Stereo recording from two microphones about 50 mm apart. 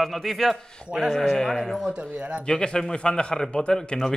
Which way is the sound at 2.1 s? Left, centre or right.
Right.